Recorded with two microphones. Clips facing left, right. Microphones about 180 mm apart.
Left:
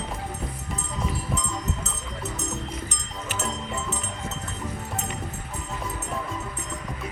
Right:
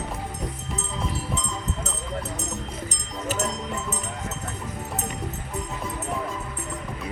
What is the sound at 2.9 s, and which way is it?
Music, 40° right (ahead or behind).